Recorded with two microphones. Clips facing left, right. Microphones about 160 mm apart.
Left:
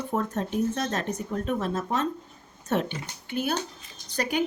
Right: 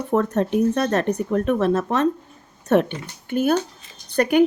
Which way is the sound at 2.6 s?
60° right (ahead or behind).